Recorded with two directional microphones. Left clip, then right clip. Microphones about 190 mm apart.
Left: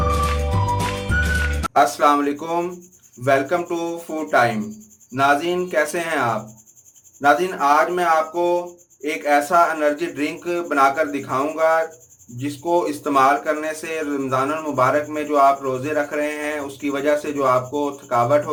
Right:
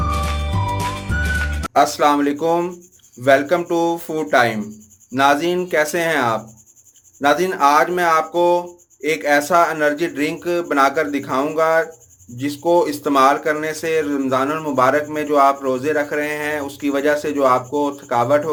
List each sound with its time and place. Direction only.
0.5 s music: centre (ahead or behind)
1.7 s speech: 30° right (ahead or behind)